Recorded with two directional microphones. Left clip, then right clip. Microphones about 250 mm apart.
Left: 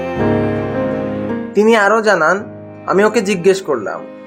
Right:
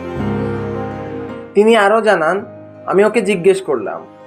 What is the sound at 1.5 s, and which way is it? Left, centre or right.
Speech, centre.